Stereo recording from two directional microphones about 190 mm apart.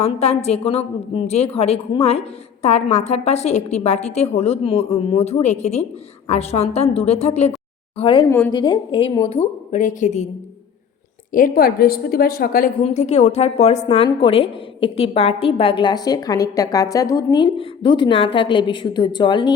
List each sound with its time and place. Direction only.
0.0 s a woman's voice: 35° left (ahead or behind)
9.7 s a woman's voice: 40° left (ahead or behind)
11.3 s a woman's voice: 50° left (ahead or behind)
12.8 s a woman's voice: 35° left (ahead or behind)